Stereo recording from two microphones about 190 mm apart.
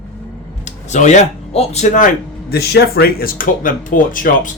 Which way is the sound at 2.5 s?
55° left (ahead or behind).